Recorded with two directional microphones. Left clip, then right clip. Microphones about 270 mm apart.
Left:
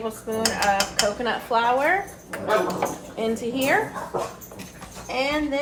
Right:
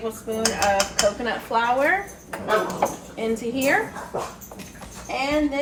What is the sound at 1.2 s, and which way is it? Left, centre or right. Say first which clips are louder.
Speech: left 1 dB; centre.